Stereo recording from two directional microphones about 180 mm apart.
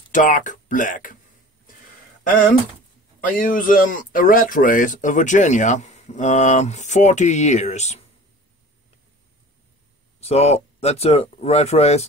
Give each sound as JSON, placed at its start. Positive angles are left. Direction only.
{"t": 0.1, "sound": "speech", "side_deg": 45}
{"t": 3.3, "sound": "speech", "side_deg": 50}
{"t": 10.2, "sound": "speech", "side_deg": 35}